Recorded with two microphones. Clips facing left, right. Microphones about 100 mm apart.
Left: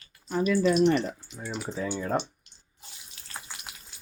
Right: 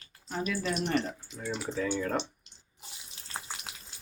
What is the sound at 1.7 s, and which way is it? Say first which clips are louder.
Speech: even; 25° left (ahead or behind).